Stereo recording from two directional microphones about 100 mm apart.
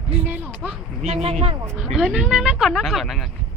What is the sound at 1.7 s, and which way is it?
Speech, 5° right (ahead or behind).